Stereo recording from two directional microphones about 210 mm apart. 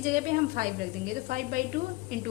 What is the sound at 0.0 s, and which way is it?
A woman's voice, 40° right (ahead or behind).